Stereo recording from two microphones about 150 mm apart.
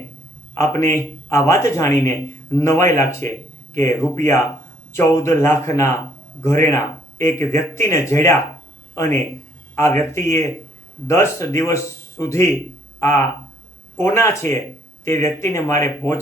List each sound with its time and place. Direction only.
0.5 s speech: 20° left (ahead or behind)